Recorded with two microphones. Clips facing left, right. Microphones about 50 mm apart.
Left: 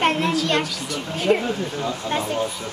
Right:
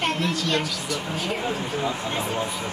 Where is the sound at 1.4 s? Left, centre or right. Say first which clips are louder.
Left 1 dB; centre.